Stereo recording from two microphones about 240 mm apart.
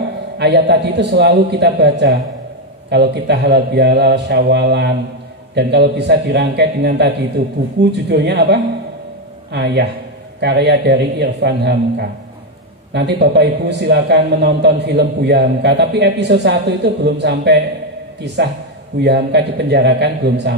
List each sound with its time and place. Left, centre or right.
0.4 s a man's voice: right